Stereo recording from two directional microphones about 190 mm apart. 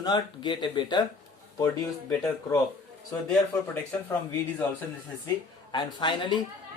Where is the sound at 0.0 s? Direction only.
20° left (ahead or behind).